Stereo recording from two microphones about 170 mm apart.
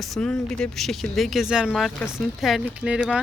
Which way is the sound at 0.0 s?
5° left (ahead or behind).